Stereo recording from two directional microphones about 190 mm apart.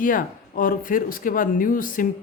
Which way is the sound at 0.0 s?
45° left (ahead or behind).